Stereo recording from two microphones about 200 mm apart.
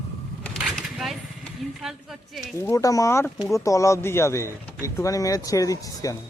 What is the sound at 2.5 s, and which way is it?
Speech, 15° left (ahead or behind).